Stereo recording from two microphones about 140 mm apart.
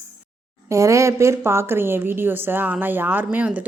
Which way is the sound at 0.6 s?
20° right (ahead or behind).